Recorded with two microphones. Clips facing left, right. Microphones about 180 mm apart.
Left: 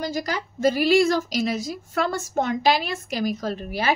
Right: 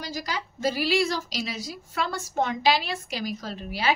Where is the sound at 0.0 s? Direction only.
50° left (ahead or behind).